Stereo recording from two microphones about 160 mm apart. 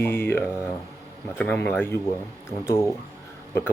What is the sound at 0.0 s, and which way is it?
Speech, 15° left (ahead or behind).